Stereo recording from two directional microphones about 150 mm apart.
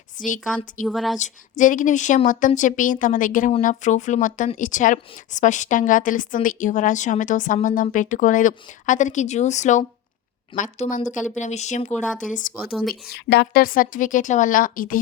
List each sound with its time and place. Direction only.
0.9 s speech: centre (ahead or behind)
1.2 s speech: 60° left (ahead or behind)
11.9 s speech: 5° left (ahead or behind)
12.3 s speech: 65° left (ahead or behind)
13.1 s a woman's voice: 90° left; by 14.9 s 65° left (ahead or behind)